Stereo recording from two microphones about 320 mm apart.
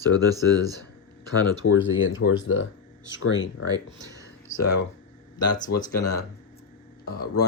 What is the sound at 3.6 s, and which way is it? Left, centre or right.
Speech, centre.